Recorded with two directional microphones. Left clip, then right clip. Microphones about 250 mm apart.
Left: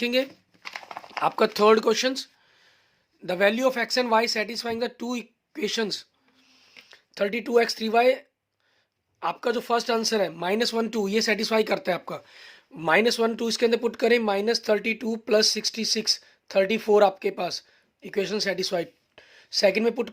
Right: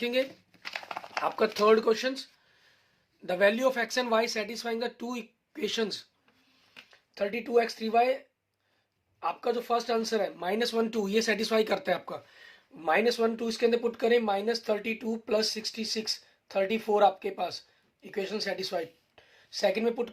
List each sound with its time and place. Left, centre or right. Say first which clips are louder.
0.0 s speech: left 4 dB; left
0.6 s a sound: even; centre
1.2 s speech: left 6 dB; left
3.2 s speech: left 3 dB; left
6.9 s speech: left 5 dB; left
9.2 s speech: left 4 dB; left